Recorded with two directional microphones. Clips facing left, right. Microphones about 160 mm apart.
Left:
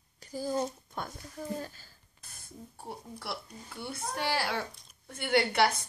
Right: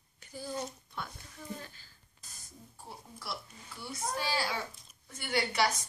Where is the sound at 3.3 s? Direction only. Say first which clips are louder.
Left 2 dB; 60° left (ahead or behind).